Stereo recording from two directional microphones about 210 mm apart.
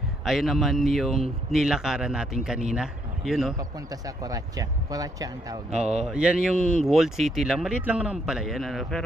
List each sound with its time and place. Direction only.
0.2 s speech: centre (ahead or behind)
3.5 s speech: 15° right (ahead or behind)
5.7 s speech: 5° right (ahead or behind)